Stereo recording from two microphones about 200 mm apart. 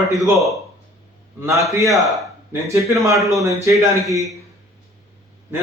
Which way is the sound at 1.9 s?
Centre (ahead or behind).